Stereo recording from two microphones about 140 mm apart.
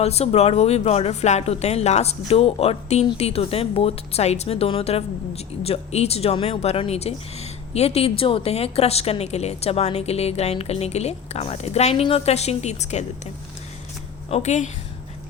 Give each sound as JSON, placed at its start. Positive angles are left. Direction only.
{"t": 0.0, "sound": "speech", "side_deg": 50}
{"t": 14.3, "sound": "a woman's voice", "side_deg": 50}